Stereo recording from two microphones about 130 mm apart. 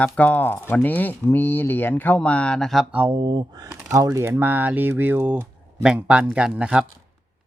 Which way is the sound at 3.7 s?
20° right (ahead or behind).